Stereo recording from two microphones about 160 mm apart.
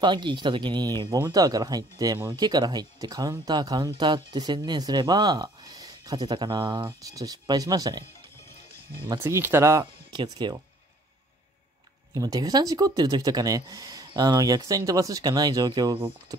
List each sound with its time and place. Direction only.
0.0 s speech: 30° right (ahead or behind)
9.2 s speech: 15° right (ahead or behind)
12.1 s speech: 25° right (ahead or behind)